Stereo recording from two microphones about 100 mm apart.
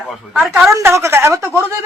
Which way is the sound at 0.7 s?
30° right (ahead or behind).